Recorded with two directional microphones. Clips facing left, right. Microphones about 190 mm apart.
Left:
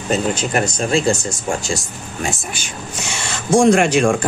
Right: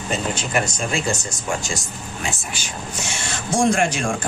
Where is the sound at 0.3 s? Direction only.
40° left (ahead or behind).